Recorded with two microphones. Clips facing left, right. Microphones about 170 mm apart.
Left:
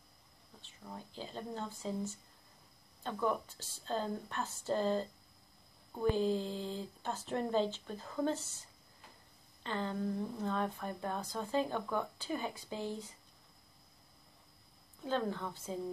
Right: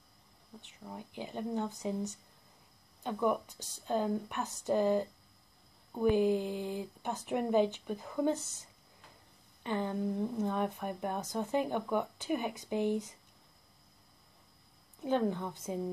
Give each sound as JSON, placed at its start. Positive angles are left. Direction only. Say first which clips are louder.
{"t": 0.6, "sound": "speech", "louder": "right 3 dB", "side_deg": -15}
{"t": 15.0, "sound": "speech", "louder": "right 4 dB", "side_deg": -15}